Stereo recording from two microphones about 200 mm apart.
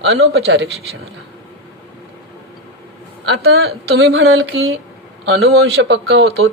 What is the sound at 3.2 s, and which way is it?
Speech, 55° right (ahead or behind).